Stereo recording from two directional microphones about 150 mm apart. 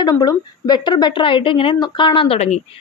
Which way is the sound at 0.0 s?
25° left (ahead or behind).